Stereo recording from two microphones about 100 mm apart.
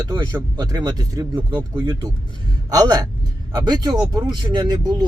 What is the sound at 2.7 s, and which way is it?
Speech, 45° right (ahead or behind).